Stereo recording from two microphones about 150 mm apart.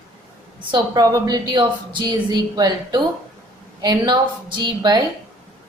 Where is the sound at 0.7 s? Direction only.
25° right (ahead or behind).